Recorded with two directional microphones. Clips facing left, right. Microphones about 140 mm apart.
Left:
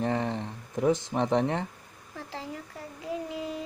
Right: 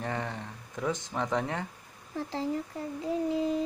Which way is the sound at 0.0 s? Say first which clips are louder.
Left 6 dB; 25° left (ahead or behind).